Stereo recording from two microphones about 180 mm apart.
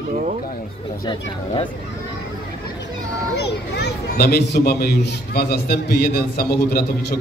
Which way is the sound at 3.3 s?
70° left (ahead or behind).